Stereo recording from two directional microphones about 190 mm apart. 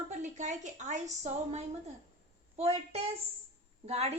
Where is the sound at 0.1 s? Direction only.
40° right (ahead or behind).